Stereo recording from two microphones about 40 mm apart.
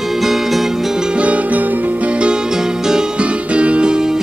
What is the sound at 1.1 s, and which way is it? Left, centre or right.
Music, right.